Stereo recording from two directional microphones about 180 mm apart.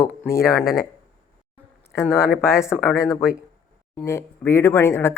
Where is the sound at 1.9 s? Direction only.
15° left (ahead or behind).